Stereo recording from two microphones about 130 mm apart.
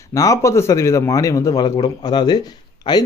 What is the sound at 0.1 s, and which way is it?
Speech, 25° left (ahead or behind).